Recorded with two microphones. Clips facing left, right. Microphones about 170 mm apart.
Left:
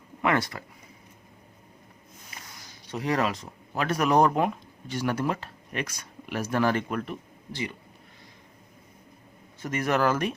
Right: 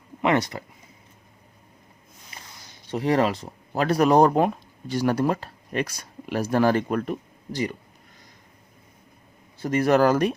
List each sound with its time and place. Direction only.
0.2 s speech: 20° right (ahead or behind)
2.9 s speech: 30° right (ahead or behind)
9.6 s speech: 35° right (ahead or behind)